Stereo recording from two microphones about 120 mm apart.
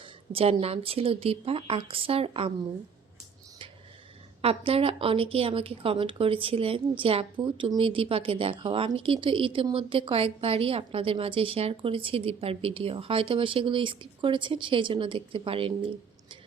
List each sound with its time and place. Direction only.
0.3 s a woman's voice: 55° right (ahead or behind)
4.4 s a woman's voice: 50° right (ahead or behind)